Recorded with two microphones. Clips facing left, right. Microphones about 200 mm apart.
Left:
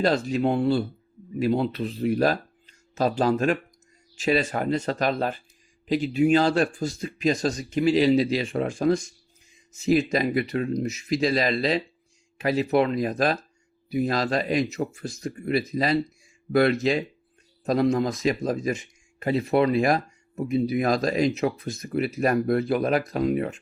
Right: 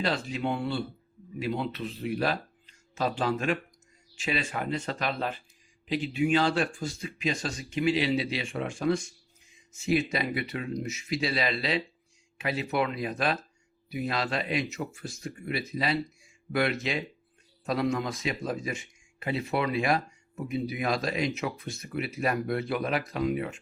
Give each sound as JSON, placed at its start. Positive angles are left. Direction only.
{"t": 0.0, "sound": "speech", "side_deg": 45}